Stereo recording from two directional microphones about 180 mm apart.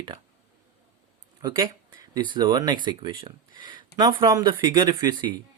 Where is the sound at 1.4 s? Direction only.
20° right (ahead or behind).